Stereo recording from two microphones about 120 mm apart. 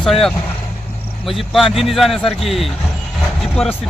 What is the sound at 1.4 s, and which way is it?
A man's voice, centre (ahead or behind).